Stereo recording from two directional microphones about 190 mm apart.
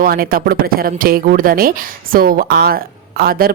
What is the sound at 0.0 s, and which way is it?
A woman's voice, 50° right (ahead or behind).